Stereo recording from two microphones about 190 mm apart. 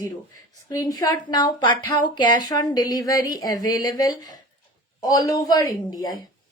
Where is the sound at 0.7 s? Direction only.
20° left (ahead or behind).